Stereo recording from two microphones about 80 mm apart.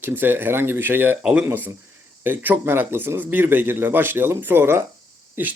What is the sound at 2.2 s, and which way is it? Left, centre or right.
Speech, right.